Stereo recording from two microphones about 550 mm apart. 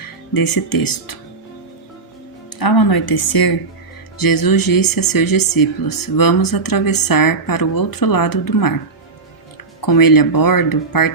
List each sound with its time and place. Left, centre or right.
0.3 s speech: left
2.6 s speech: left
9.8 s speech: left